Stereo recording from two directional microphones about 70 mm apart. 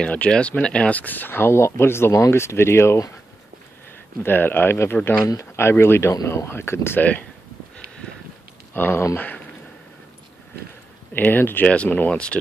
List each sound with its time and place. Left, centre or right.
0.0 s speech: centre; by 3.0 s left
4.2 s speech: left
7.0 s speech: left
8.7 s speech: left
11.1 s speech: left
11.6 s speech: centre